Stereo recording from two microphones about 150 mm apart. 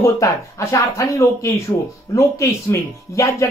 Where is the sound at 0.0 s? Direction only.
20° left (ahead or behind).